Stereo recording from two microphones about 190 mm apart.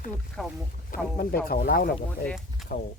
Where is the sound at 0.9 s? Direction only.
50° left (ahead or behind).